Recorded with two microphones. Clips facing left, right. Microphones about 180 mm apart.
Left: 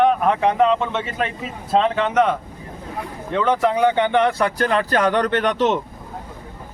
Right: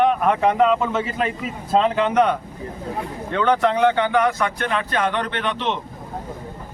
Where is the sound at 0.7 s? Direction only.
5° right (ahead or behind); by 5.8 s 45° left (ahead or behind).